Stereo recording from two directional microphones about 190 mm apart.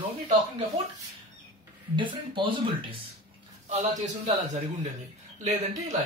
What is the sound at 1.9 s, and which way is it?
Speech, 25° right (ahead or behind).